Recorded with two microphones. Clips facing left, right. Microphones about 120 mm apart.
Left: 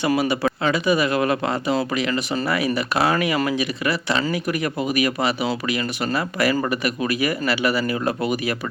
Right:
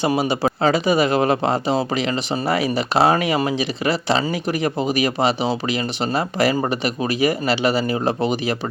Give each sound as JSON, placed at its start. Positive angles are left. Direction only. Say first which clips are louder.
{"t": 0.0, "sound": "speech", "louder": "right 1 dB", "side_deg": -30}